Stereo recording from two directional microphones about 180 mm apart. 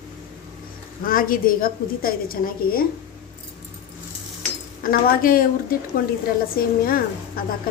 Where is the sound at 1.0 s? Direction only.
50° left (ahead or behind).